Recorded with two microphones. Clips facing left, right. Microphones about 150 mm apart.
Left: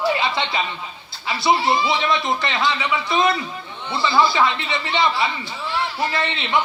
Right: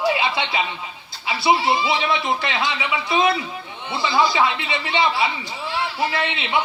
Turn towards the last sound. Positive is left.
turn(degrees=-15)  # may be behind; listen again after turning